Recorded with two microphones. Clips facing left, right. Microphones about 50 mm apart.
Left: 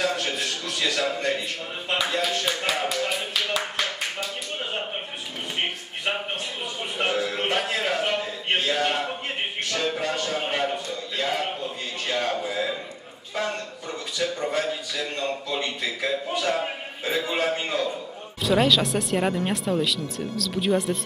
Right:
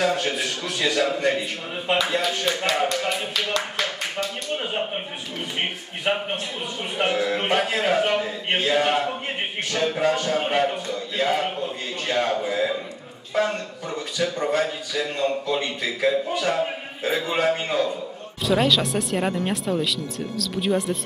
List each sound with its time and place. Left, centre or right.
0.0 s a man's voice: centre
6.1 s a man's voice: centre
8.7 s a man's voice: centre
10.1 s a man's voice: centre